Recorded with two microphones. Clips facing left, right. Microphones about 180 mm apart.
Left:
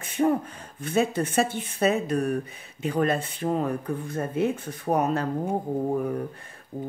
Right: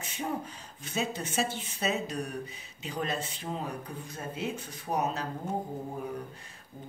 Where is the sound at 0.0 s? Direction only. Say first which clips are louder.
Left 12 dB; 55° left (ahead or behind).